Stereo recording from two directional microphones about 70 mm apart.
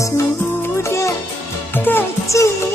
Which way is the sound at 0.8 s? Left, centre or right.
Left.